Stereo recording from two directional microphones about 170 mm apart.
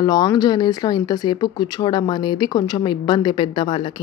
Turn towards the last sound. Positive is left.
turn(degrees=25)  # may be behind; listen again after turning